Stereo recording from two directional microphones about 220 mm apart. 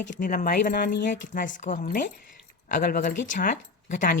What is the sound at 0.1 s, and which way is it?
A woman's voice, 35° left (ahead or behind).